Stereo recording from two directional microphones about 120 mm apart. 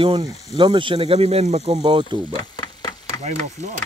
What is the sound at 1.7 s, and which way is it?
Speech, 40° right (ahead or behind).